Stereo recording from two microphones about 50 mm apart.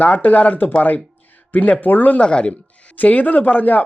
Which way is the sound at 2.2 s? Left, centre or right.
Centre.